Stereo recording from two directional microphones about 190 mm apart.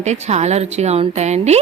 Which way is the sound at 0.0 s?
35° right (ahead or behind).